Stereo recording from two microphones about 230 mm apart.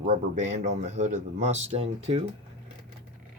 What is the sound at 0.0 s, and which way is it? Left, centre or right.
A man's voice, right.